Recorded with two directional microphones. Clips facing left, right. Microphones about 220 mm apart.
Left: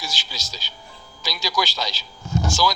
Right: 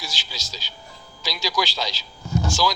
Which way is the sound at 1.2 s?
45° left (ahead or behind).